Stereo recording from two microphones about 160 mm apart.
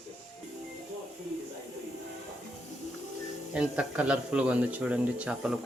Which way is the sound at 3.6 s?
5° right (ahead or behind).